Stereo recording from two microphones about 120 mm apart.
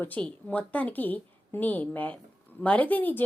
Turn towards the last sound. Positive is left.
turn(degrees=15)  # may be behind; listen again after turning